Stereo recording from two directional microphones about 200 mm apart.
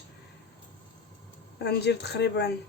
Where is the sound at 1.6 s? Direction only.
55° left (ahead or behind).